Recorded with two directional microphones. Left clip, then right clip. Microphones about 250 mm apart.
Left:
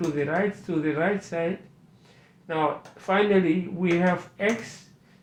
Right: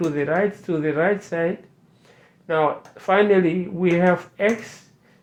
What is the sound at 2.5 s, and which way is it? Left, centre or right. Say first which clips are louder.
Speech: right 5 dB; right.